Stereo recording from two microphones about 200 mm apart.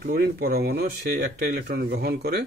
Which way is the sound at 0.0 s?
50° right (ahead or behind).